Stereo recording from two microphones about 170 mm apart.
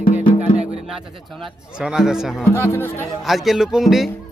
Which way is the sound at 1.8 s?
5° right (ahead or behind).